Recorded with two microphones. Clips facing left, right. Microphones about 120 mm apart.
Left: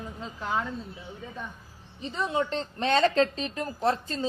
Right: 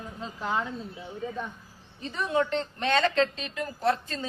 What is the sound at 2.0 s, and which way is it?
A woman's voice, 20° left (ahead or behind).